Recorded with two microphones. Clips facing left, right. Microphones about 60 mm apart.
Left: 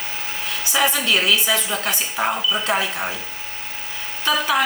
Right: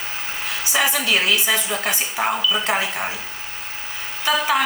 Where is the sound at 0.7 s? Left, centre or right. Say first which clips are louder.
Left 1 dB; centre.